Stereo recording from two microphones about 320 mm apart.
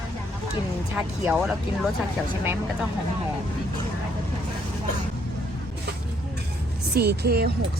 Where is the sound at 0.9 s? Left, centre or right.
Centre.